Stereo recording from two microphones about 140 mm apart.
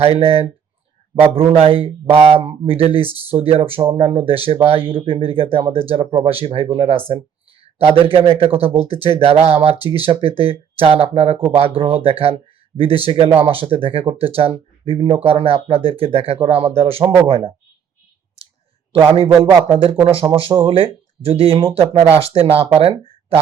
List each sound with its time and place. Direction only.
0.0 s speech: 45° right (ahead or behind)
9.8 s speech: 30° left (ahead or behind)
10.1 s speech: 40° right (ahead or behind)
19.5 s speech: 40° right (ahead or behind)